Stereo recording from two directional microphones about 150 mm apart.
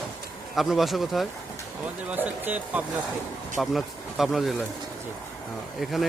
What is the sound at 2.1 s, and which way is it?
Speech, 10° right (ahead or behind).